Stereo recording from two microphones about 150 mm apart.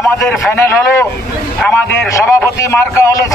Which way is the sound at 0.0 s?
15° left (ahead or behind).